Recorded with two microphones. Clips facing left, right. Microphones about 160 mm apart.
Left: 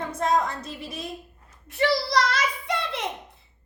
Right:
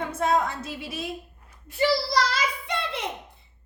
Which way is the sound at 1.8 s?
Centre (ahead or behind).